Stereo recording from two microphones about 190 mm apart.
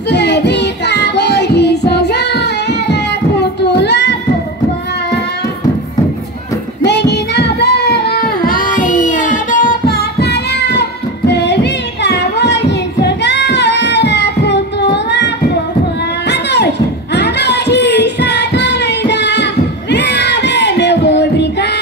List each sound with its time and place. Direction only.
0.1 s child singing: 65° left (ahead or behind)
6.8 s child singing: 60° left (ahead or behind)
8.5 s singing: 45° left (ahead or behind); by 15.3 s 65° left (ahead or behind)
16.3 s a sound: 60° left (ahead or behind)